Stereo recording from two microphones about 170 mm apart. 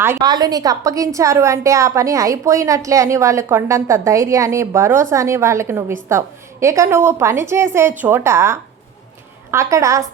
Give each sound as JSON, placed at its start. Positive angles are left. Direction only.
{"t": 0.0, "sound": "a woman's voice", "side_deg": -20}